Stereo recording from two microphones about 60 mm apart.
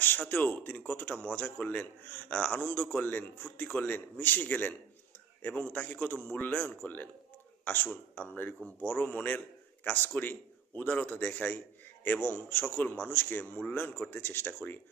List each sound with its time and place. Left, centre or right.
0.0 s a man's voice: left